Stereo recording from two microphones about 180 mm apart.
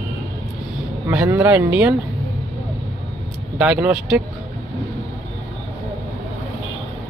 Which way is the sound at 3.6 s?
5° right (ahead or behind).